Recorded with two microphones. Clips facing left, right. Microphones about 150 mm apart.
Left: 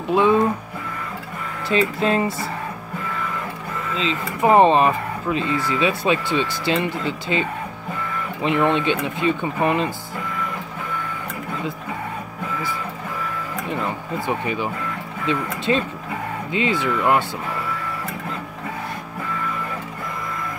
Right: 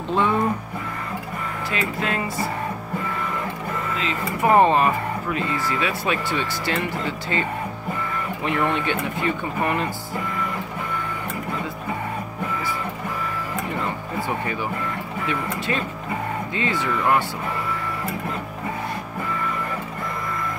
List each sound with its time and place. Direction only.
0.1 s speech: 15° left (ahead or behind)
1.7 s speech: 30° left (ahead or behind)
3.9 s speech: 20° left (ahead or behind)
8.5 s speech: 20° left (ahead or behind)
14.2 s speech: 20° left (ahead or behind)